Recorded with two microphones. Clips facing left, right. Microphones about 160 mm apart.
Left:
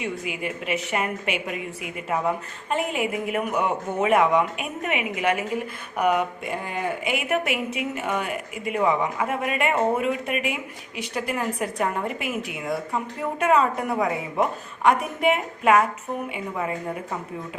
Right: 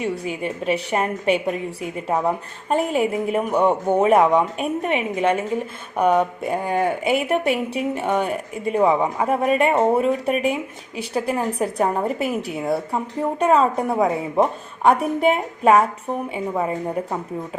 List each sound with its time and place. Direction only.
0.0 s a woman's voice: 35° right (ahead or behind)